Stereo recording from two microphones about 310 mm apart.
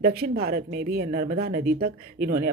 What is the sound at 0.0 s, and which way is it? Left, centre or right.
Speech, right.